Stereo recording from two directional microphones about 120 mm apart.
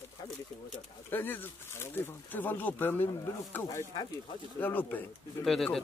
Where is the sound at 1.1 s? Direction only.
15° left (ahead or behind).